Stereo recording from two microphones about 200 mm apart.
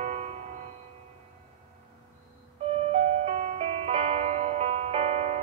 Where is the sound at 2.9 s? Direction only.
30° right (ahead or behind).